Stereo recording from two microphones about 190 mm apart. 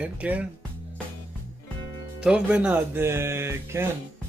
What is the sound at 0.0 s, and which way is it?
Speech, 5° right (ahead or behind).